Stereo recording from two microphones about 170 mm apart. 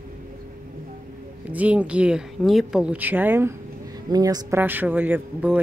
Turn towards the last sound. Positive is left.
turn(degrees=-10)  # may be behind; listen again after turning